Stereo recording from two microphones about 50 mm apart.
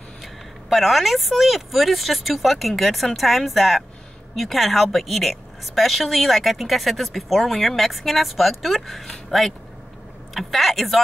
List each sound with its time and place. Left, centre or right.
0.2 s a woman's voice: centre